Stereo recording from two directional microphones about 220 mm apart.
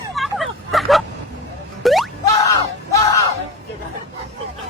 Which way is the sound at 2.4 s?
15° left (ahead or behind).